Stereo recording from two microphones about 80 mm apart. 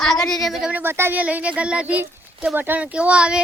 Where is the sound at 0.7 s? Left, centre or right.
Right.